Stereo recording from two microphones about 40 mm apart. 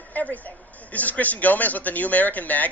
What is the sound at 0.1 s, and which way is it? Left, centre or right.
A woman's voice, left.